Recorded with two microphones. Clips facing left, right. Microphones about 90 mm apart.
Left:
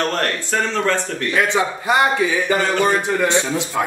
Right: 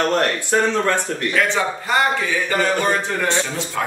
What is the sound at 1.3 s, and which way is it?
Speech, 15° left (ahead or behind).